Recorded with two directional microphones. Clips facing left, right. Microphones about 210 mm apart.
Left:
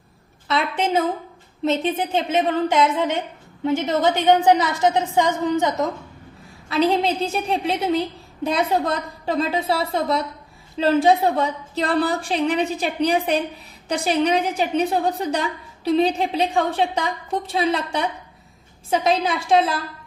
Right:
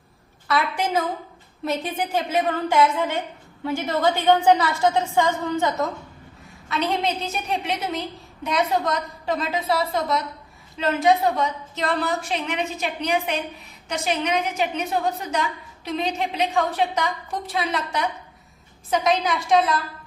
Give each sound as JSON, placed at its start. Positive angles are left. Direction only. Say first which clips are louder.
{"t": 0.4, "sound": "a woman's voice", "louder": "left 1 dB", "side_deg": 25}
{"t": 6.7, "sound": "a woman's voice", "louder": "left 5 dB", "side_deg": 35}